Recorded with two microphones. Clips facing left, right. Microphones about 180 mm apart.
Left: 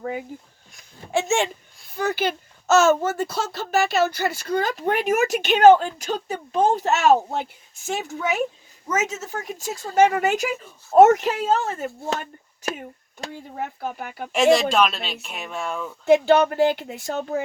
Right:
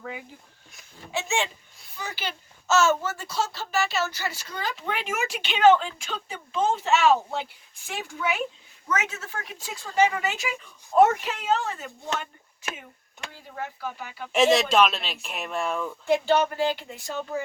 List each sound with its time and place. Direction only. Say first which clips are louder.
0.0 s speech: left 8 dB; 45° left (ahead or behind)
1.1 s a sound: left 6 dB; 50° left (ahead or behind)
2.0 s speech: left 11 dB; 55° left (ahead or behind)
13.3 s speech: left 4 dB; 55° left (ahead or behind)
14.3 s speech: left 2 dB; centre (ahead or behind)
16.0 s speech: left 6 dB; 65° left (ahead or behind)